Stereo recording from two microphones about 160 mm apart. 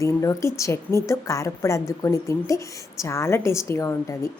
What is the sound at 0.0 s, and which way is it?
A woman's voice, 20° left (ahead or behind).